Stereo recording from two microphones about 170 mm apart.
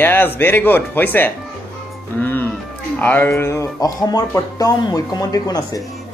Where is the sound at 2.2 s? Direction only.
10° left (ahead or behind).